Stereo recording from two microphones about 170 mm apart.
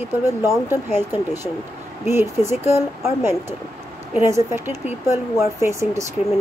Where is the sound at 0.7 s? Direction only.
15° right (ahead or behind).